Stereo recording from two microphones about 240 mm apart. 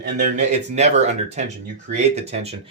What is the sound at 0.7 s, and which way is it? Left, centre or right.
Speech, right.